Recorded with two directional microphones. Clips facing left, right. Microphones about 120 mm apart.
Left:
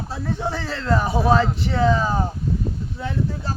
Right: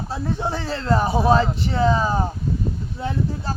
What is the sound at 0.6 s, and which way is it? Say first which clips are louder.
Speech: right 2 dB; 35° right (ahead or behind).